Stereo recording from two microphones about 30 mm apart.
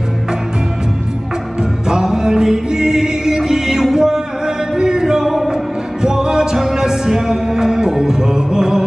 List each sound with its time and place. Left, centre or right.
1.9 s music: right
3.9 s a sound: centre
4.7 s music: right